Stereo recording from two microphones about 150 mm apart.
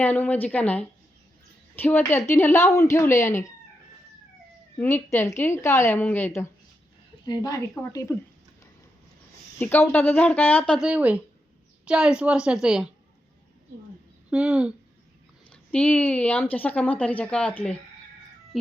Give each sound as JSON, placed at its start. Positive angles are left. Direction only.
{"t": 0.0, "sound": "a woman's voice", "side_deg": 10}
{"t": 4.8, "sound": "a woman's voice", "side_deg": 15}
{"t": 9.6, "sound": "a woman's voice", "side_deg": 15}
{"t": 10.8, "sound": "a woman's voice", "side_deg": -5}
{"t": 14.3, "sound": "speech", "side_deg": -5}
{"t": 15.4, "sound": "a woman's voice", "side_deg": 5}